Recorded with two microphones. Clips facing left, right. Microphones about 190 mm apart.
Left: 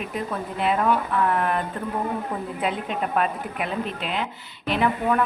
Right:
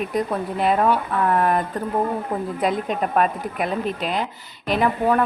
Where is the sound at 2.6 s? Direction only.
40° right (ahead or behind).